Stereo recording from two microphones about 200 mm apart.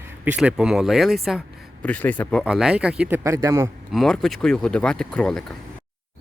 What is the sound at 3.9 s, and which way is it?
Speech, centre (ahead or behind).